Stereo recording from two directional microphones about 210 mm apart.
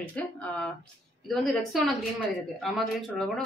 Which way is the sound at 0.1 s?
5° left (ahead or behind).